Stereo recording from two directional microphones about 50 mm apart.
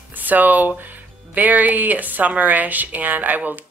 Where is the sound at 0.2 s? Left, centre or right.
Right.